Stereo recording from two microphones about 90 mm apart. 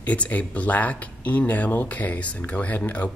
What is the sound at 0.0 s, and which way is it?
Speech, 15° left (ahead or behind).